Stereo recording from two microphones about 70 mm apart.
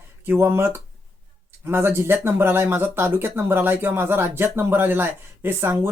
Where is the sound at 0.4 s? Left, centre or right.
Right.